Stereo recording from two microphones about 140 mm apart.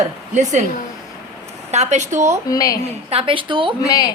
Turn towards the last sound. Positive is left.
turn(degrees=25)  # may be behind; listen again after turning